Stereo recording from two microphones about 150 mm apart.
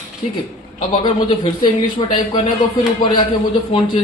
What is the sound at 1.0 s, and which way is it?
Speech, 35° left (ahead or behind).